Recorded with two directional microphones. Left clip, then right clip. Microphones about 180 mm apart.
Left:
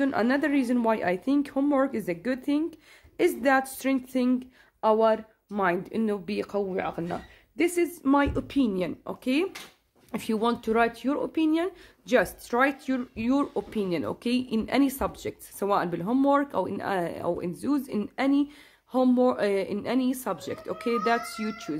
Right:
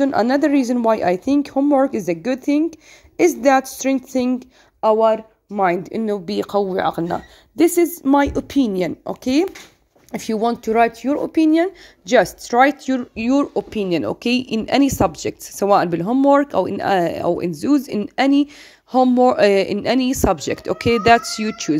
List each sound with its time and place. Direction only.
0.0 s speech: 30° right (ahead or behind)